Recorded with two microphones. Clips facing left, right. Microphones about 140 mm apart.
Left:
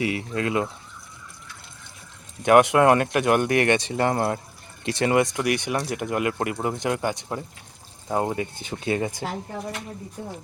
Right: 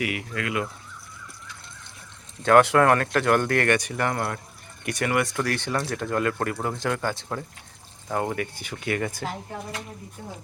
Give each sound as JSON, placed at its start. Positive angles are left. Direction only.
{"t": 0.0, "sound": "speech", "side_deg": 30}
{"t": 2.4, "sound": "speech", "side_deg": 15}